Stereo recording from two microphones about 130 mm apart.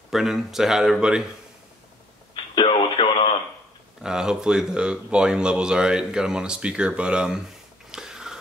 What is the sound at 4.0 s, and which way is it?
Speech, 5° right (ahead or behind).